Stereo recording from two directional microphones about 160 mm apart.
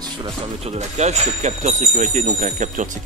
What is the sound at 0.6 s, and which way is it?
Speech, 40° right (ahead or behind).